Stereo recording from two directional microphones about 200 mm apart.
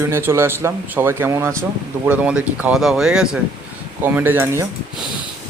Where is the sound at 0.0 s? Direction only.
10° right (ahead or behind).